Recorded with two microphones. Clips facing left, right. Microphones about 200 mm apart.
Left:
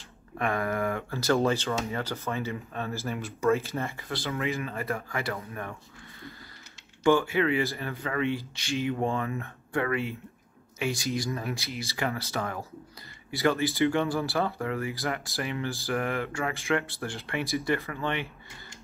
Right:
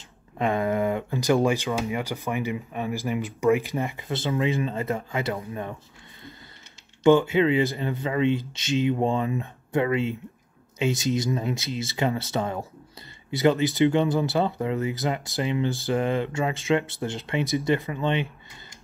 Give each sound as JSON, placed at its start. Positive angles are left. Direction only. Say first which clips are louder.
{"t": 0.4, "sound": "speech", "louder": "right 5 dB", "side_deg": -20}
{"t": 7.0, "sound": "speech", "louder": "right 5 dB", "side_deg": -20}